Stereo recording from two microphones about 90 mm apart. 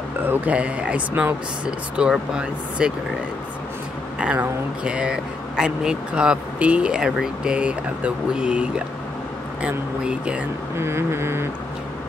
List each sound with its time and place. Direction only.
0.2 s speech: 20° right (ahead or behind)
4.2 s speech: 10° right (ahead or behind)
10.8 s a sound: 30° right (ahead or behind)